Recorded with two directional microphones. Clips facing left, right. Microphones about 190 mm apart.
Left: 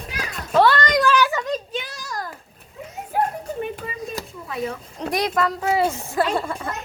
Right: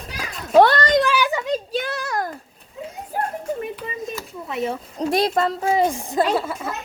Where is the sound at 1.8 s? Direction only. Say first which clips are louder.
Right 7 dB; 60° right (ahead or behind).